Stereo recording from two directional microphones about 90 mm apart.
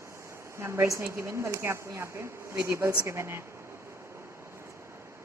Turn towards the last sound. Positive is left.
turn(degrees=-30)  # may be behind; listen again after turning